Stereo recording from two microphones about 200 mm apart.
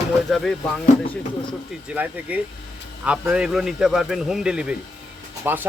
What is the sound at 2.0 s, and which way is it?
Speech, 10° right (ahead or behind).